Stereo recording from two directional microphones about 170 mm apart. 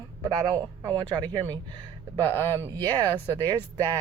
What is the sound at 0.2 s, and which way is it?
A woman's voice, 25° right (ahead or behind).